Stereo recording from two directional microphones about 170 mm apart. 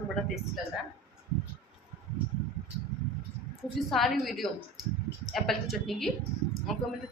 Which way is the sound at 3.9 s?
Centre (ahead or behind).